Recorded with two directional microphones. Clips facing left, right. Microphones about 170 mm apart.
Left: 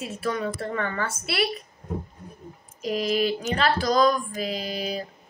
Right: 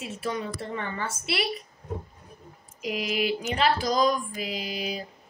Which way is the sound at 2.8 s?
10° right (ahead or behind).